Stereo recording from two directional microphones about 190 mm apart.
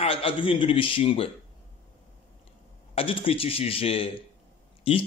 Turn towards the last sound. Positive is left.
turn(degrees=30)  # may be behind; listen again after turning